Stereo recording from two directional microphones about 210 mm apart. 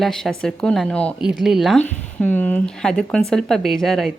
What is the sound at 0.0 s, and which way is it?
Speech, centre (ahead or behind).